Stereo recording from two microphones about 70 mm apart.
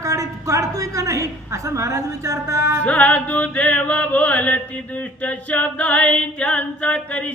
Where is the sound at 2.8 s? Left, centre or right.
Centre.